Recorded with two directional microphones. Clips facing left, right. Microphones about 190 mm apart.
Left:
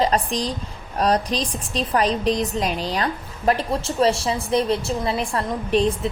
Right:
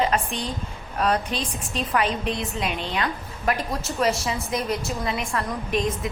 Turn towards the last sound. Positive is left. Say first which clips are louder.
# left 5 dB
turn(degrees=30)  # may be behind; listen again after turning